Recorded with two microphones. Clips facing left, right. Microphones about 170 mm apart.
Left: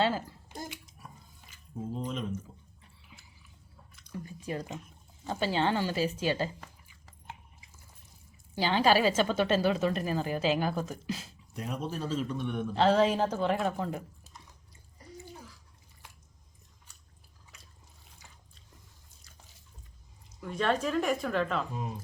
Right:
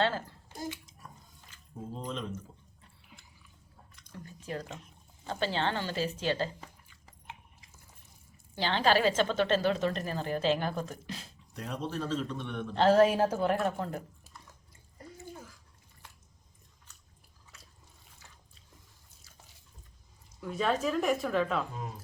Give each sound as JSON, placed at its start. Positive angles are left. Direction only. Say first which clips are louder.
{"t": 0.0, "sound": "a sound", "louder": "left 1 dB", "side_deg": 10}
{"t": 4.1, "sound": "drip", "louder": "left 3 dB", "side_deg": 10}
{"t": 5.2, "sound": "a woman's voice", "louder": "left 2 dB", "side_deg": 10}
{"t": 8.5, "sound": "a woman's voice", "louder": "left 2 dB", "side_deg": 10}
{"t": 12.8, "sound": "a woman's voice", "louder": "right 2 dB", "side_deg": -5}
{"t": 14.9, "sound": "bathtub", "louder": "right 1 dB", "side_deg": -50}
{"t": 17.5, "sound": "trickle", "louder": "right 1 dB", "side_deg": 15}
{"t": 20.4, "sound": "a woman's voice", "louder": "even", "side_deg": 0}